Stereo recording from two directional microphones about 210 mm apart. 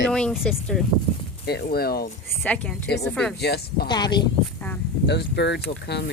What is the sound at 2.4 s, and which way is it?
Speech, 5° left (ahead or behind).